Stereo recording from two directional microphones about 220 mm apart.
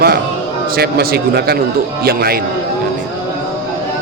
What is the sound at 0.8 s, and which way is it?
A man's voice, 45° right (ahead or behind).